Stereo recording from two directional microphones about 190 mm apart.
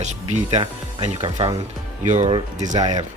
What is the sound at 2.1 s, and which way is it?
Speech, 40° right (ahead or behind).